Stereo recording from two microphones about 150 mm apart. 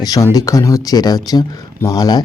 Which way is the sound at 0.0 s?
25° left (ahead or behind).